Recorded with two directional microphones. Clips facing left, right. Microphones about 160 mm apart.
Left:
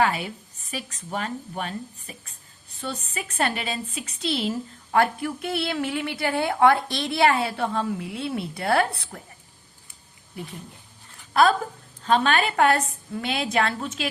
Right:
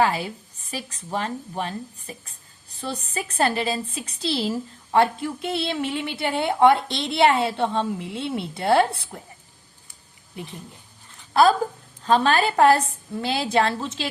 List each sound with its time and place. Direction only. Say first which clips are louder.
0.0 s a woman's voice: right 2 dB; 30° right (ahead or behind)
12.0 s a woman's voice: right 2 dB; 35° right (ahead or behind)